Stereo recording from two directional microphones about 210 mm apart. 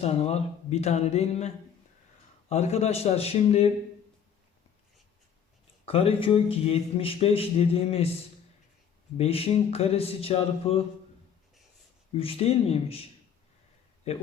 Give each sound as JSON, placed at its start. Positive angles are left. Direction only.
{"t": 0.0, "sound": "speech", "side_deg": 30}
{"t": 5.8, "sound": "speech", "side_deg": 25}
{"t": 9.1, "sound": "speech", "side_deg": 30}
{"t": 12.1, "sound": "speech", "side_deg": 25}